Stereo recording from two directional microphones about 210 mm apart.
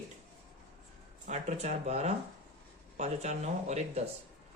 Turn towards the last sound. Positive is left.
turn(degrees=-35)  # may be behind; listen again after turning